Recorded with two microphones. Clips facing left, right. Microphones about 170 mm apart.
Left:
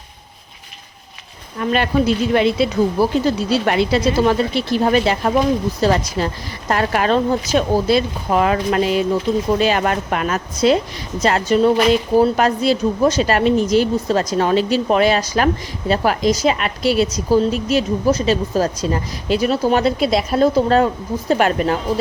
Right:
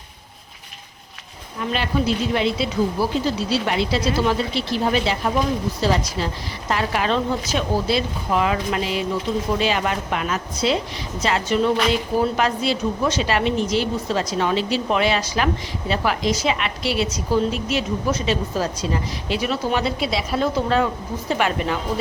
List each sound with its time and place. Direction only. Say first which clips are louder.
1.5 s a woman's voice: left 6 dB; 55° left (ahead or behind)